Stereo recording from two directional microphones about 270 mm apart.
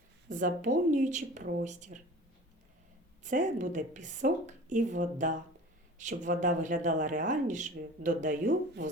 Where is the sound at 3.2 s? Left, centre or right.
Right.